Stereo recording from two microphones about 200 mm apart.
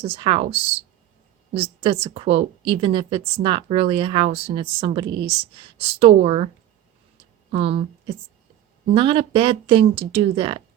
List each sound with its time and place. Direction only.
0.0 s a woman's voice: 30° right (ahead or behind)
7.5 s a woman's voice: 30° right (ahead or behind)